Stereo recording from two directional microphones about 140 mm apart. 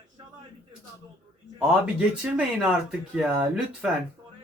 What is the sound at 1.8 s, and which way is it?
Speech, 5° right (ahead or behind).